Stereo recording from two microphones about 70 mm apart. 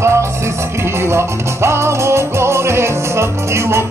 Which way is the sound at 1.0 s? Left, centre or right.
Right.